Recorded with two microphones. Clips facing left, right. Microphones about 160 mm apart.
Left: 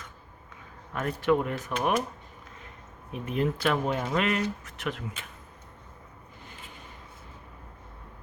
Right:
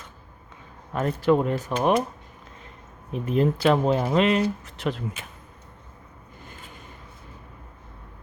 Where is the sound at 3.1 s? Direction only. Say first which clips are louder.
Right 6 dB; 35° right (ahead or behind).